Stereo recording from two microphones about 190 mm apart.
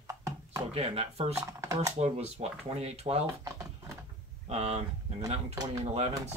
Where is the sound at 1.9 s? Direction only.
35° right (ahead or behind).